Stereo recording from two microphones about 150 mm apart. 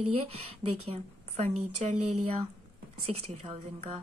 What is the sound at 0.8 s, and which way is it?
Speech, 45° right (ahead or behind).